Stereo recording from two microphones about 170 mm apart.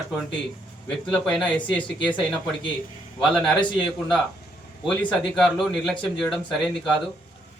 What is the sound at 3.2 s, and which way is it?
Speech, 5° left (ahead or behind).